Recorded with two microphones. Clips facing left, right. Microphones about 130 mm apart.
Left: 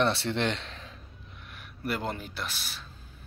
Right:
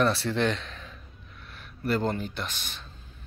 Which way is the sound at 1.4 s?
10° left (ahead or behind).